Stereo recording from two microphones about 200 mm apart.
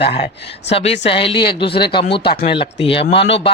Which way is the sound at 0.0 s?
30° left (ahead or behind).